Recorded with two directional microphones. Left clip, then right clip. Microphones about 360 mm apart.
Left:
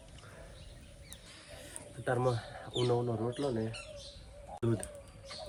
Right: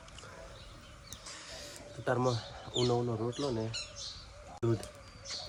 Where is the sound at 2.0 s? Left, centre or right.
Centre.